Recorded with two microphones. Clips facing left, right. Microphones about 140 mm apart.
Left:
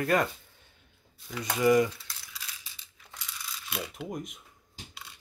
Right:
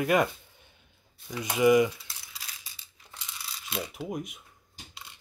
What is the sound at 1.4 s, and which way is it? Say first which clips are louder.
Speech: right 2 dB; 15° right (ahead or behind).